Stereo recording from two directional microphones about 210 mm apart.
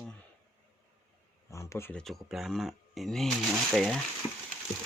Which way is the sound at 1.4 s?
15° left (ahead or behind).